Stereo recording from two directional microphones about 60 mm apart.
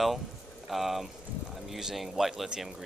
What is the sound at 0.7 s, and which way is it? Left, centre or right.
Speech, centre.